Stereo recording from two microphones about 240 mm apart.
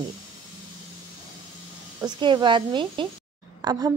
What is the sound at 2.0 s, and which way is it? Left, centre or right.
A woman's voice, centre.